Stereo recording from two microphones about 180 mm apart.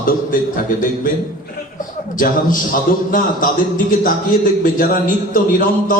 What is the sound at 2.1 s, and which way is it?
A man's voice, 50° left (ahead or behind).